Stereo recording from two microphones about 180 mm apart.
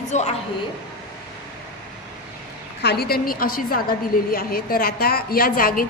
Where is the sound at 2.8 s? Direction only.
65° left (ahead or behind).